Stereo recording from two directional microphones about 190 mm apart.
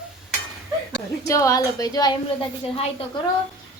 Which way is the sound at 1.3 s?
15° left (ahead or behind).